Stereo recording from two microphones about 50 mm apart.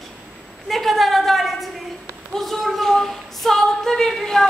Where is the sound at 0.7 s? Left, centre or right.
Centre.